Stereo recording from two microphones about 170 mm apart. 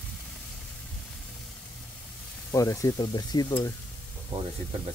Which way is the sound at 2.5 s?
20° left (ahead or behind).